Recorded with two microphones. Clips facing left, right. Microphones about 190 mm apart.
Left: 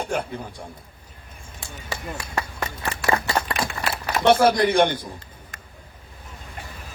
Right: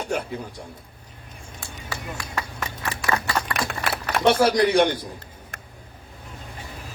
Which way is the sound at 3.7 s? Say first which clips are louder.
Even; 55° right (ahead or behind).